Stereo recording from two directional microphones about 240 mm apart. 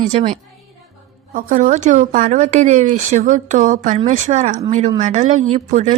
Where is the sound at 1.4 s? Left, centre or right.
Right.